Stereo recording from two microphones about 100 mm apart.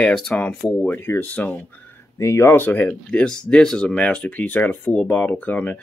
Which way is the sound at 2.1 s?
30° left (ahead or behind).